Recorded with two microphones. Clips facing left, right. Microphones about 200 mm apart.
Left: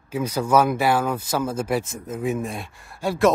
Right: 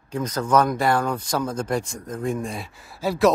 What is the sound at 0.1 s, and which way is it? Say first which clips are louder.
Speech: left 1 dB; 10° left (ahead or behind).